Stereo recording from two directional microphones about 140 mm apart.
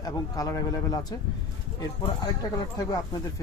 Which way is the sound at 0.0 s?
25° left (ahead or behind).